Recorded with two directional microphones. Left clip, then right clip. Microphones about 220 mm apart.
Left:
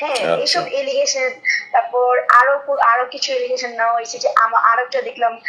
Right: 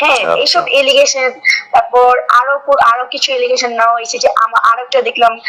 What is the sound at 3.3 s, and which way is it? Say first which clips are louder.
Speech: right 7 dB; 45° right (ahead or behind).